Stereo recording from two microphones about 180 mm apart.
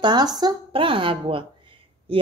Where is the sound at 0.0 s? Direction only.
25° right (ahead or behind).